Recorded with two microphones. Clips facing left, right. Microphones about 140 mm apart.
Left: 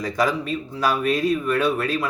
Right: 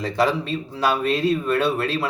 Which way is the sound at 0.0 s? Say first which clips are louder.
Right 1 dB; 25° right (ahead or behind).